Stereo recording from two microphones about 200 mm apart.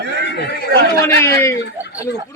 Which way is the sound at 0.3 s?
60° left (ahead or behind).